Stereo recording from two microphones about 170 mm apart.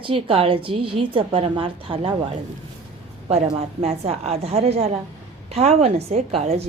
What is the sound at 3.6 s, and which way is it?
A woman's voice, 40° right (ahead or behind).